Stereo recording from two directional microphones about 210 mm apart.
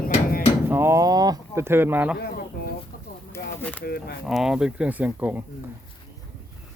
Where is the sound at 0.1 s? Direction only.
45° left (ahead or behind).